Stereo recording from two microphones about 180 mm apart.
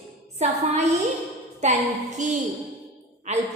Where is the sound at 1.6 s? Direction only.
40° right (ahead or behind).